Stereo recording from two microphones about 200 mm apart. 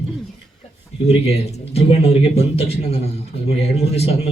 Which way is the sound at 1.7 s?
30° left (ahead or behind).